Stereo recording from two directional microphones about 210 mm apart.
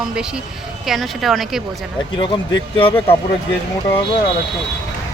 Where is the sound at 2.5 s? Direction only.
25° left (ahead or behind).